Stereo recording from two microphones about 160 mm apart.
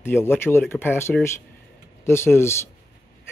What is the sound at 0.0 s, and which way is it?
Speech, 15° left (ahead or behind).